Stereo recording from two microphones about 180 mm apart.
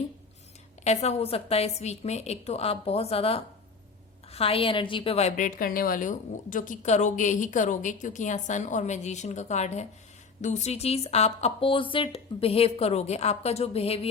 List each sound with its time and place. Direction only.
0.9 s a woman's voice: 35° left (ahead or behind)